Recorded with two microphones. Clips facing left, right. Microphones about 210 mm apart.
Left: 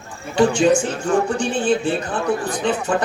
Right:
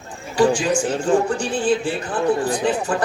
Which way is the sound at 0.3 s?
25° left (ahead or behind).